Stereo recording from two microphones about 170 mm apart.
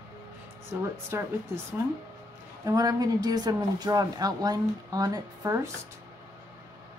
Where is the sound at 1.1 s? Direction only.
15° right (ahead or behind).